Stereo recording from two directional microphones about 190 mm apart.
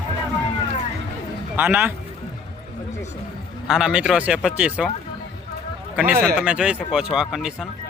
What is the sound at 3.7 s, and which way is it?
Speech, 5° right (ahead or behind).